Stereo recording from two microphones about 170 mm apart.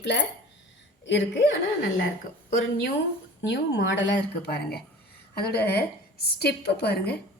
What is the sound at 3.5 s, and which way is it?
A woman's voice, 90° left.